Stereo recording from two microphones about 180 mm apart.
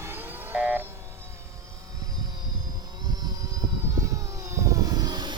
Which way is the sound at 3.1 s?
20° right (ahead or behind).